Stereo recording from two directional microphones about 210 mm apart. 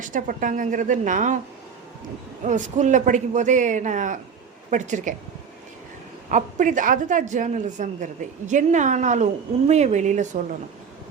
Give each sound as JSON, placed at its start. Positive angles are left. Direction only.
{"t": 0.0, "sound": "a woman's voice", "side_deg": -40}
{"t": 2.4, "sound": "a woman's voice", "side_deg": -35}
{"t": 6.3, "sound": "a woman's voice", "side_deg": -35}